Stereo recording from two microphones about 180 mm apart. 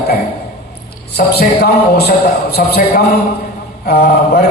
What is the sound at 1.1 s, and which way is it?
Speech, 60° left (ahead or behind).